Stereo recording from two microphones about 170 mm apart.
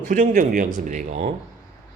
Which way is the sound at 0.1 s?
50° right (ahead or behind).